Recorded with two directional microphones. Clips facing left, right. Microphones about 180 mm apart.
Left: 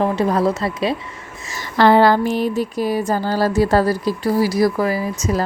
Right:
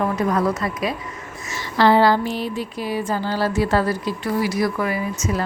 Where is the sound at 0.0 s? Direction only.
30° left (ahead or behind).